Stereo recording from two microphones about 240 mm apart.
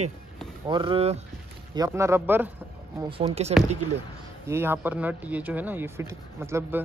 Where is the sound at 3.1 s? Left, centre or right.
Right.